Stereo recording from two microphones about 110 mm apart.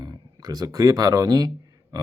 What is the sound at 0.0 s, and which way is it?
Speech, 35° right (ahead or behind).